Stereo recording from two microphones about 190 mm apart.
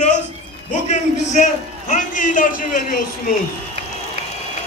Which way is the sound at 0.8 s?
40° left (ahead or behind).